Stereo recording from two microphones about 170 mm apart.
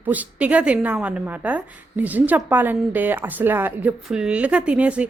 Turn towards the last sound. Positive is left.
turn(degrees=-5)  # may be behind; listen again after turning